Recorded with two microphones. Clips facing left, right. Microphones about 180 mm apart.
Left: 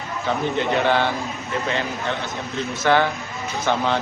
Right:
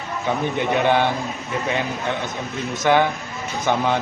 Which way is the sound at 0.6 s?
15° right (ahead or behind).